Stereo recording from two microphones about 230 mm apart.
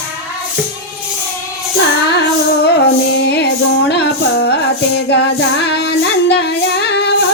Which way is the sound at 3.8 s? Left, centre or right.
Left.